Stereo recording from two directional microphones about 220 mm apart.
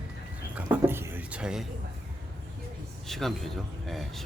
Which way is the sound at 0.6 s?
10° right (ahead or behind).